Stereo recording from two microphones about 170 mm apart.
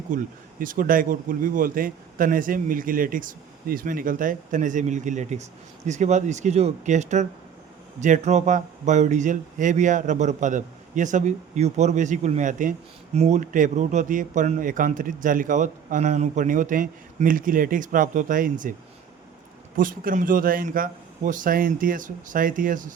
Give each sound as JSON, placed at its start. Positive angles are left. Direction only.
{"t": 0.1, "sound": "a man's voice", "side_deg": -45}
{"t": 19.7, "sound": "a man's voice", "side_deg": -55}